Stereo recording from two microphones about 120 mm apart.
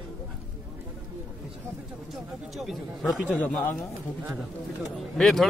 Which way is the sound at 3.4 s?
15° left (ahead or behind).